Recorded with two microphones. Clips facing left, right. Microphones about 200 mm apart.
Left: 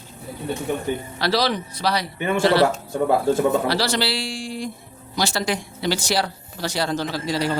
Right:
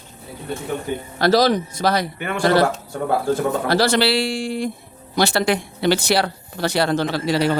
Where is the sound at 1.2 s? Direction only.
45° right (ahead or behind).